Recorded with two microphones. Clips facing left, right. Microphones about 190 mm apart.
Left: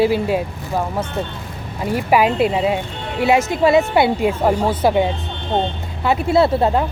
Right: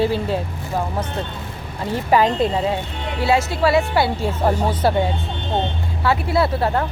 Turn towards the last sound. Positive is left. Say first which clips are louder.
# left 4 dB
turn(degrees=25)  # may be behind; listen again after turning